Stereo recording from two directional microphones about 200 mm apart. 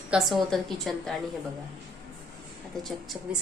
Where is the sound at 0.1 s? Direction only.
Centre (ahead or behind).